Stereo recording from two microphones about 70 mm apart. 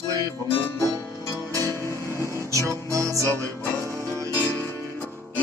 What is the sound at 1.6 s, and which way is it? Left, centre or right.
Music, left.